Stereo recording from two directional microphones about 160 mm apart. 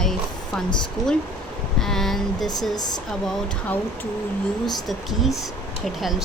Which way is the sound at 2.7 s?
25° left (ahead or behind).